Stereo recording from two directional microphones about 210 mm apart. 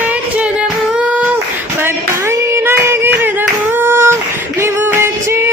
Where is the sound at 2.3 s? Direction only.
10° right (ahead or behind).